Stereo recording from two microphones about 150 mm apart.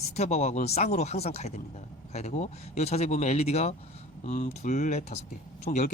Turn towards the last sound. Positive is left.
turn(degrees=60)  # may be behind; listen again after turning